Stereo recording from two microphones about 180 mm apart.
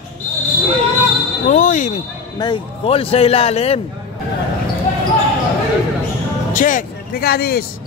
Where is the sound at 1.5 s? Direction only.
45° left (ahead or behind).